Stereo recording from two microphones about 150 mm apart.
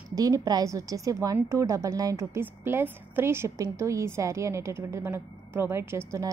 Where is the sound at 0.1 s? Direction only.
25° right (ahead or behind).